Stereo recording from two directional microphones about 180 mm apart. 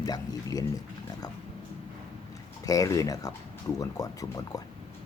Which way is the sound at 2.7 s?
20° left (ahead or behind).